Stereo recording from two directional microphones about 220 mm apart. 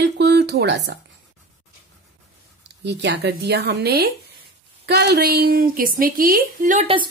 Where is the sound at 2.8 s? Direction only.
50° right (ahead or behind); by 7.1 s 25° right (ahead or behind).